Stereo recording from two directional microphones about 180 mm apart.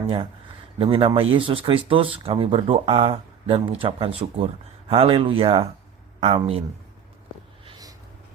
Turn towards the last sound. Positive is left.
turn(degrees=-35)  # may be behind; listen again after turning